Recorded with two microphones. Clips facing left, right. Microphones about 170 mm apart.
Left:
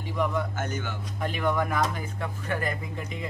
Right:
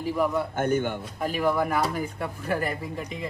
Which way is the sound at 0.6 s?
55° right (ahead or behind).